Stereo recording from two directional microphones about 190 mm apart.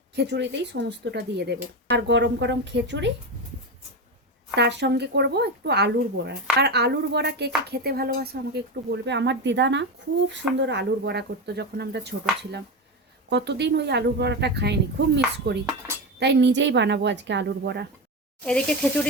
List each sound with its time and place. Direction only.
0.2 s speech: 65° right (ahead or behind)
4.5 s speech: 65° right (ahead or behind)
18.4 s speech: 5° left (ahead or behind)